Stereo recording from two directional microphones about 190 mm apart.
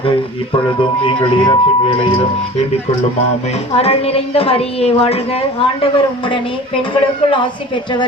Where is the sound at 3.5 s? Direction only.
30° left (ahead or behind).